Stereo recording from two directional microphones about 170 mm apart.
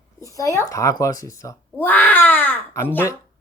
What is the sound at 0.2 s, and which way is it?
Speech, 20° left (ahead or behind).